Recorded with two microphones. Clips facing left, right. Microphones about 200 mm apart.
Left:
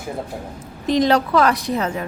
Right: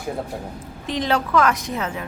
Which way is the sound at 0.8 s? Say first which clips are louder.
Left 6 dB; 40° left (ahead or behind).